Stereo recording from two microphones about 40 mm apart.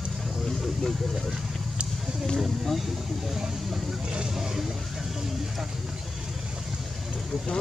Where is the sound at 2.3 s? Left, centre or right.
Centre.